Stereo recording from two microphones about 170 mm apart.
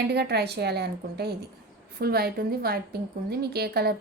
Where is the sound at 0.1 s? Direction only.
70° right (ahead or behind).